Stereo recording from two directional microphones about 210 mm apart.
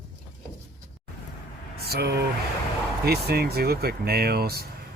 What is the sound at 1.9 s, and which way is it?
Speech, 50° right (ahead or behind).